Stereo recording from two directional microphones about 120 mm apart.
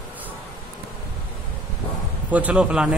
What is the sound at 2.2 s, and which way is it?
Speech, 10° right (ahead or behind).